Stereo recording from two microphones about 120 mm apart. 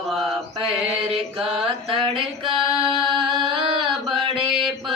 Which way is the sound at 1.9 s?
45° right (ahead or behind).